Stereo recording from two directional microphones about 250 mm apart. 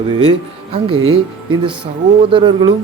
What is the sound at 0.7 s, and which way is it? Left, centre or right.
Speech, right.